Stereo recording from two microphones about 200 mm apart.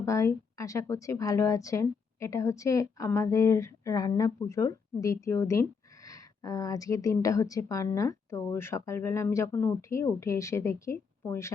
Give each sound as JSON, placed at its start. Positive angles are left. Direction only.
{"t": 0.0, "sound": "a woman's voice", "side_deg": 15}